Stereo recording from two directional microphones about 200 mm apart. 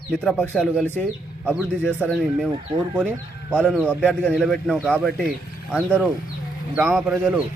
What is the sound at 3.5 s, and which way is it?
Speech, 5° right (ahead or behind).